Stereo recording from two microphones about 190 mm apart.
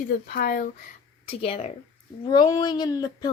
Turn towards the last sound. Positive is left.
turn(degrees=20)  # may be behind; listen again after turning